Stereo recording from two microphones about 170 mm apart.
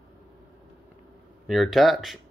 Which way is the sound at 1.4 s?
Centre (ahead or behind).